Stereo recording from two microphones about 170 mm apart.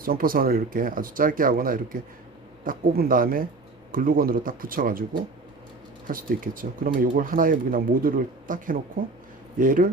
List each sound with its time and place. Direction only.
0.0 s speech: 60° right (ahead or behind)
6.1 s speech: 55° right (ahead or behind)